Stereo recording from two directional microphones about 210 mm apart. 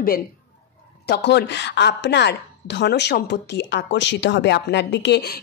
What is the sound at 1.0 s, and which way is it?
A woman's voice, 55° left (ahead or behind).